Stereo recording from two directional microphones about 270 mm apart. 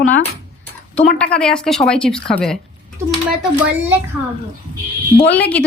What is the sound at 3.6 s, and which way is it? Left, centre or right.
Speech, centre.